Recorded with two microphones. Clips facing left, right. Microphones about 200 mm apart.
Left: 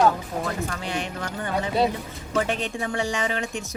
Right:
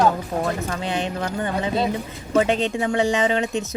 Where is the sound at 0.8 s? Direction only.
25° right (ahead or behind).